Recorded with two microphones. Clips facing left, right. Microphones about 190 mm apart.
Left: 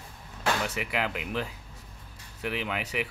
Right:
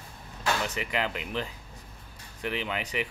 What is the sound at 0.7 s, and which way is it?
Speech, 10° left (ahead or behind).